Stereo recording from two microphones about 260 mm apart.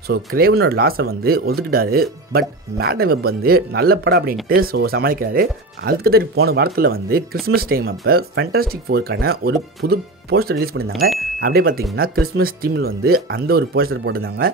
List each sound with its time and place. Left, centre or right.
0.1 s speech: right